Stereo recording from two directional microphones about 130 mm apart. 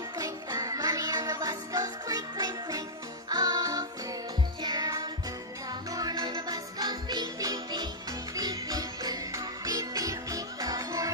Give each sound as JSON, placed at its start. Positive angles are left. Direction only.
{"t": 0.2, "sound": "music", "side_deg": -30}